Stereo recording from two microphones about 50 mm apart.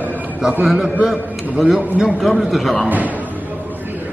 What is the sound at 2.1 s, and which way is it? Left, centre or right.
Speech, centre.